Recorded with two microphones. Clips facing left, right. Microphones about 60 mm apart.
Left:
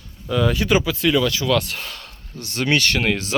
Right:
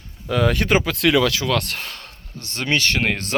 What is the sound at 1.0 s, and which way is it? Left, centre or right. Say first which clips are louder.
Speech: right 1 dB; right.